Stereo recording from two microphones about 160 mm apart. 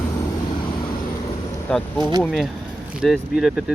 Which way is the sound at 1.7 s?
5° left (ahead or behind).